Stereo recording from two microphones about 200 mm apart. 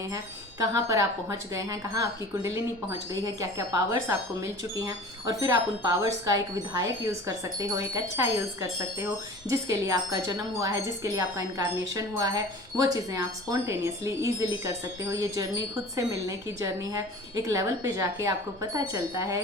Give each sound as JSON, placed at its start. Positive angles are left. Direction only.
{"t": 0.6, "sound": "speech", "side_deg": -15}
{"t": 3.8, "sound": "speech", "side_deg": -15}